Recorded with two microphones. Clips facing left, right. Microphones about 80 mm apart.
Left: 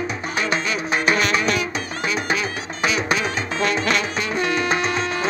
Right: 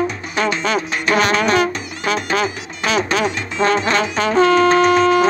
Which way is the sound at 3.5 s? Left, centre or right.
Right.